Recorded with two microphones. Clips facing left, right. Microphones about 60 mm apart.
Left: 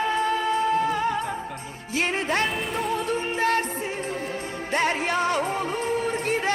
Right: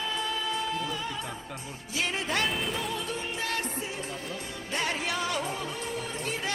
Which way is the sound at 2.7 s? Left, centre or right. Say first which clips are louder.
Left 7 dB; left.